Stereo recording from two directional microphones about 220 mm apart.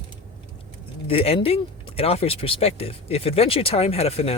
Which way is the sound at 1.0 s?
25° left (ahead or behind).